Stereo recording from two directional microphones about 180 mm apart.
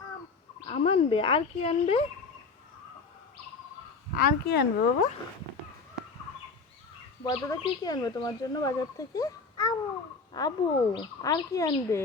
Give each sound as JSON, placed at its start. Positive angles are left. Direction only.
{"t": 0.7, "sound": "speech", "side_deg": 35}
{"t": 4.1, "sound": "speech", "side_deg": 55}
{"t": 7.3, "sound": "speech", "side_deg": 20}